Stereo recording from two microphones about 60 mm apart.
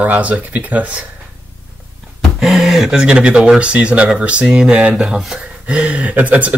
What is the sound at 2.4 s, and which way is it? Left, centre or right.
Speech, centre.